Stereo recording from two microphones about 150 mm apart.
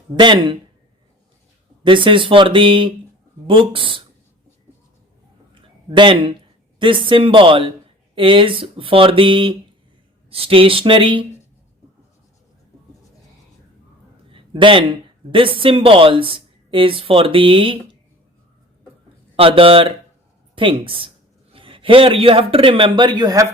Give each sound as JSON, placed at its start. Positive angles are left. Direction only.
{"t": 0.2, "sound": "a man's voice", "side_deg": -30}
{"t": 1.8, "sound": "a man's voice", "side_deg": -35}
{"t": 5.9, "sound": "a man's voice", "side_deg": -35}
{"t": 14.3, "sound": "speech", "side_deg": -35}
{"t": 19.4, "sound": "a man's voice", "side_deg": -40}